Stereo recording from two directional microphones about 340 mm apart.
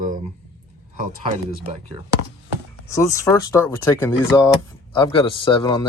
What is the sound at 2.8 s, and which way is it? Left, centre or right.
Speech, centre.